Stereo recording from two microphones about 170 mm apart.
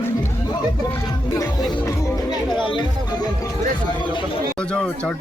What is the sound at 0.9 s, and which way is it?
Speech, 20° left (ahead or behind).